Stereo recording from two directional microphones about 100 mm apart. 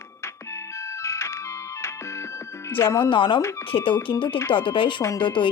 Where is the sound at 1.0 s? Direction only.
25° left (ahead or behind).